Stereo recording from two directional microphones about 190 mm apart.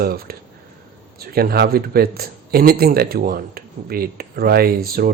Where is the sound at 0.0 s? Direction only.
50° right (ahead or behind).